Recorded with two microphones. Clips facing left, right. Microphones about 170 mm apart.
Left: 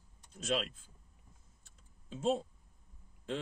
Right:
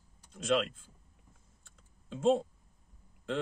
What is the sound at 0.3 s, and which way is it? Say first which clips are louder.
Speech: right 5 dB; 55° right (ahead or behind).